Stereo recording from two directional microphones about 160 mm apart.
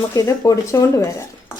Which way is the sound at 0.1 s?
20° left (ahead or behind).